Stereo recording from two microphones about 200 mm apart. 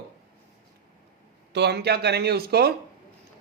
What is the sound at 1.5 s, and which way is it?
Speech, 55° right (ahead or behind).